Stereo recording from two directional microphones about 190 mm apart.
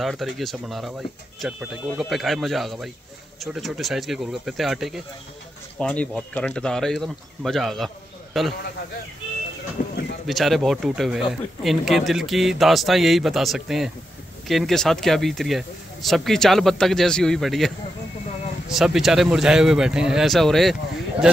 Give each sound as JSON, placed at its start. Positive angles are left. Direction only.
{"t": 0.0, "sound": "speech", "side_deg": 0}
{"t": 9.8, "sound": "a sound", "side_deg": 50}
{"t": 10.2, "sound": "speech", "side_deg": 0}